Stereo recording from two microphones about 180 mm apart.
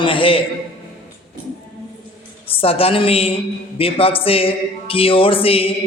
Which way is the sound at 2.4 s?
30° left (ahead or behind).